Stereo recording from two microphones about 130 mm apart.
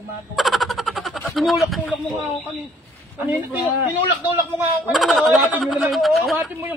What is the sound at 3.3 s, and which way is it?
Speech, 15° right (ahead or behind).